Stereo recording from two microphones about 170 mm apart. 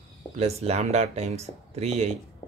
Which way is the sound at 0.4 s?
40° right (ahead or behind).